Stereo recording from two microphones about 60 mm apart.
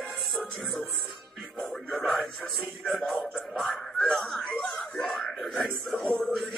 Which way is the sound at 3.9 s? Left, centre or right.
Centre.